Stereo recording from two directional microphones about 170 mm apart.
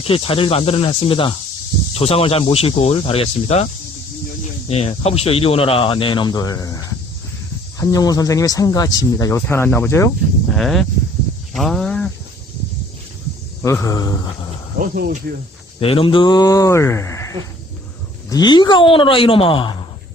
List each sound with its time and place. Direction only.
0.1 s speech: 35° left (ahead or behind)
4.7 s speech: 40° left (ahead or behind); by 10.1 s 15° left (ahead or behind)
10.5 s speech: centre (ahead or behind)
11.5 s a sound: centre (ahead or behind)
13.6 s speech: 15° left (ahead or behind)
14.8 s speech: 60° right (ahead or behind)
15.8 s speech: 35° left (ahead or behind)